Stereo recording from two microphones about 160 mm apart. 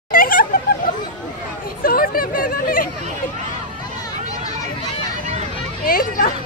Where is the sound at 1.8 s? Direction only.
65° left (ahead or behind).